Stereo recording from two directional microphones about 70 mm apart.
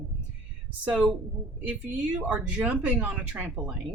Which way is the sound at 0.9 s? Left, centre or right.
Centre.